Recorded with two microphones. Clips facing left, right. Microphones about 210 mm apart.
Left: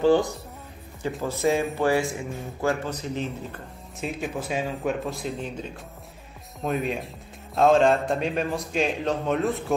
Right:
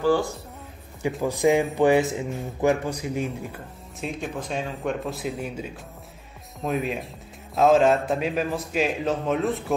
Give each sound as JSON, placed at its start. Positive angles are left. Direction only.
{"t": 0.0, "sound": "speech", "side_deg": 20}
{"t": 1.2, "sound": "speech", "side_deg": -15}
{"t": 4.0, "sound": "a man's voice", "side_deg": 5}